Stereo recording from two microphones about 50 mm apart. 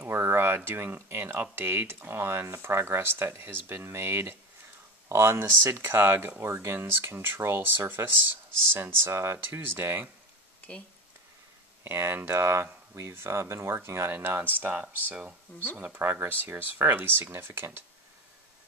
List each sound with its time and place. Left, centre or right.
0.1 s a sound: right
1.0 s speech: right
6.4 s speech: right
6.7 s speech: right
9.4 s speech: right
11.8 s speech: right
14.1 s speech: right
16.0 s speech: right